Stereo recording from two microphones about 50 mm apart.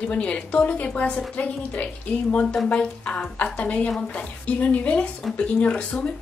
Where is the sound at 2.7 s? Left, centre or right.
Centre.